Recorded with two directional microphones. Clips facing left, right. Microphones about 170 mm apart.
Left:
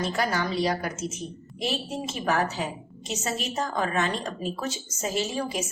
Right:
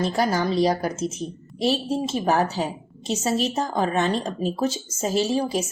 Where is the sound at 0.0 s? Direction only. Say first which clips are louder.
Right 5 dB; 35° right (ahead or behind).